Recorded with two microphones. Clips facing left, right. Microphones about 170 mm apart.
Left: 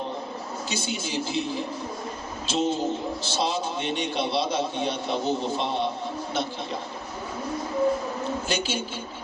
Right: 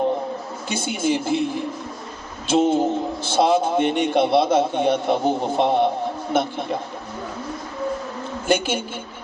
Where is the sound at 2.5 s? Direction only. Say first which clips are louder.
Right 7 dB; 55° right (ahead or behind).